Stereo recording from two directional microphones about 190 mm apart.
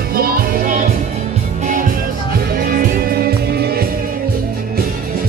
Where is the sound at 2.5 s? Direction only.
50° right (ahead or behind).